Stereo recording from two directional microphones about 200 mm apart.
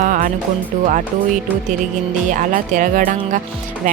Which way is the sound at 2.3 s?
40° right (ahead or behind).